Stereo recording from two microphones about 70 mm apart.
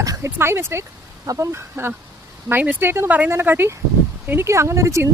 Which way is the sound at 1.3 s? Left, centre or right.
Right.